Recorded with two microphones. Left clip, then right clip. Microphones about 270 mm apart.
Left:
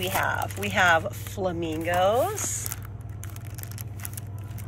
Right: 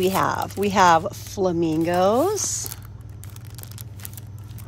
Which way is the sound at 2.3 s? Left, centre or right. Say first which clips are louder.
Right 6 dB; centre.